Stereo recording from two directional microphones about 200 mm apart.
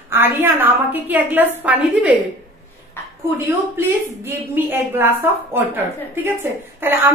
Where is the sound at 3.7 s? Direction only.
10° right (ahead or behind).